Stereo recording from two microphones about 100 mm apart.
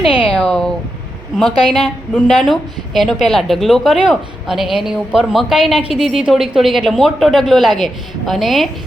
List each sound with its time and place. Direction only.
0.0 s a sound: 65° left (ahead or behind)
0.3 s speech: 5° left (ahead or behind)
2.1 s a woman's voice: centre (ahead or behind)